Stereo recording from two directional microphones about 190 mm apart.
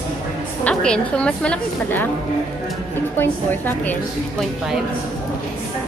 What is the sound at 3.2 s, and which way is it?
Speech, 10° left (ahead or behind).